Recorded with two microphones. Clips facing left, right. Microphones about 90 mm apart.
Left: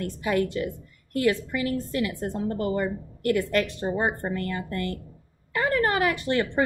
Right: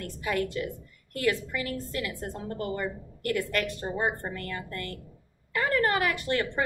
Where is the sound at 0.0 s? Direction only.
25° left (ahead or behind).